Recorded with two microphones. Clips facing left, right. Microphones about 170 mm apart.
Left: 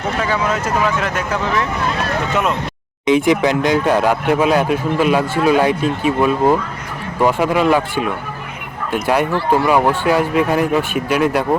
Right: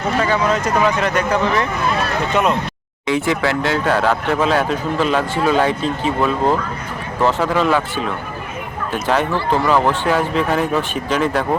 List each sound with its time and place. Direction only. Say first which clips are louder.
0.2 s speech: right 2 dB; 5° left (ahead or behind)
3.1 s speech: left 4 dB; 15° left (ahead or behind)